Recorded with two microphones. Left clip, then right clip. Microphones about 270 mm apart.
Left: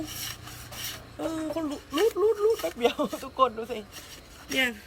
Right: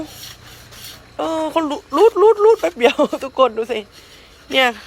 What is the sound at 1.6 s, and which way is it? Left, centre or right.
Speech, right.